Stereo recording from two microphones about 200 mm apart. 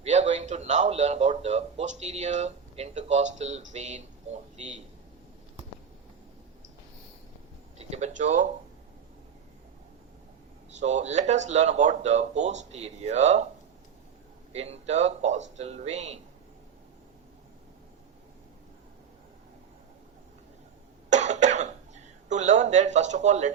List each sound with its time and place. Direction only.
0.0 s a man's voice: 35° right (ahead or behind)
7.8 s a man's voice: 35° right (ahead or behind)
10.8 s a man's voice: 35° right (ahead or behind)
14.5 s a man's voice: 30° right (ahead or behind)
21.1 s cough: 35° right (ahead or behind)